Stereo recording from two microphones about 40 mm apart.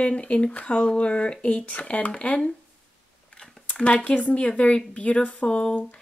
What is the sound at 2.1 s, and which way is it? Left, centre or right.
Speech, left.